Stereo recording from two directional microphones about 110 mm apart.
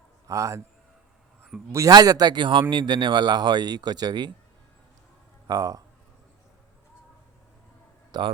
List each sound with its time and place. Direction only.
0.3 s a man's voice: 30° right (ahead or behind)
1.7 s speech: 30° right (ahead or behind)
5.5 s speech: 30° right (ahead or behind)
8.1 s speech: 40° right (ahead or behind)